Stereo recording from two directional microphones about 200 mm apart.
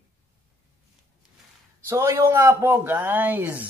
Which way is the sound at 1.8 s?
15° right (ahead or behind).